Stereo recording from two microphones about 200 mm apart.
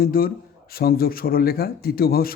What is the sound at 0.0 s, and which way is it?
Speech, 45° left (ahead or behind).